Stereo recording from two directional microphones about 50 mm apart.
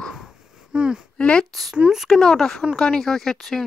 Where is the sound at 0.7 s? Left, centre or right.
Centre.